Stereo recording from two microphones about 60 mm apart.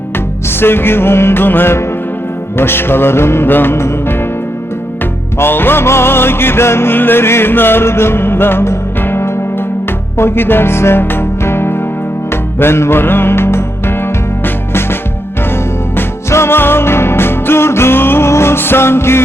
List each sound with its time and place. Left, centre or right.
0.6 s music: left
5.4 s music: left
16.3 s music: left